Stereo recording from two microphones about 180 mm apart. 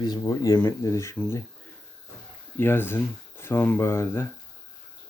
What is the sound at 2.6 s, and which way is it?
Speech, 10° left (ahead or behind).